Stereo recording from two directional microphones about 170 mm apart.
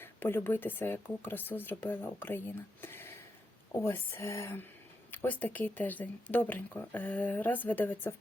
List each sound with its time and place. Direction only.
0.0 s speech: 15° left (ahead or behind)
2.8 s a sound: 15° left (ahead or behind)
3.7 s speech: 15° left (ahead or behind)